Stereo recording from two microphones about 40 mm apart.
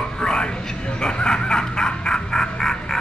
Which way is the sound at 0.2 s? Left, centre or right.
Centre.